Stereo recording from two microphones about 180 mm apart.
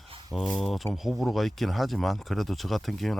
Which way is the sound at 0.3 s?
Centre (ahead or behind).